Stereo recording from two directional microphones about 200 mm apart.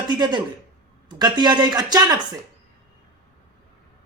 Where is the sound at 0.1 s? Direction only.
20° right (ahead or behind).